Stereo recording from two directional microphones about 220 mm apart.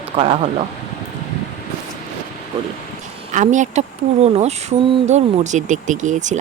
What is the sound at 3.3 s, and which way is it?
Speech, 35° right (ahead or behind).